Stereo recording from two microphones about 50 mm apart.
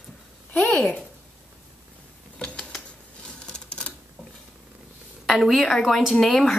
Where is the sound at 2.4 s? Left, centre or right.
Centre.